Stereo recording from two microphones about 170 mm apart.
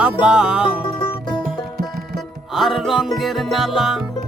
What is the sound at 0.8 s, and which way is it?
Music, 30° left (ahead or behind).